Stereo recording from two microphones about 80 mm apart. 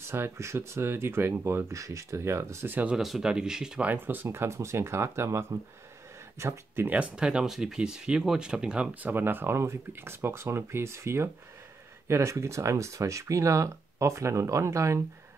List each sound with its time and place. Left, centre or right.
0.0 s speech: right
2.7 s speech: centre
3.0 s speech: centre
3.8 s speech: right
7.0 s speech: centre
9.0 s speech: right